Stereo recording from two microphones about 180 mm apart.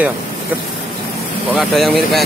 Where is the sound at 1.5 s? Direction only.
Centre (ahead or behind).